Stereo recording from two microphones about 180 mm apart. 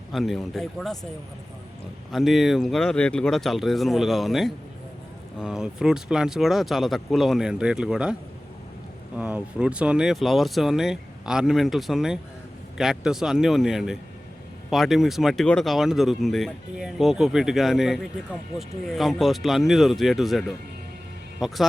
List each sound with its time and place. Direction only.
0.1 s speech: centre (ahead or behind)
2.1 s speech: centre (ahead or behind)
9.1 s speech: 5° right (ahead or behind)